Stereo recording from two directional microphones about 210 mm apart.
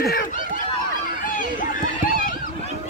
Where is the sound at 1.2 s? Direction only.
40° left (ahead or behind).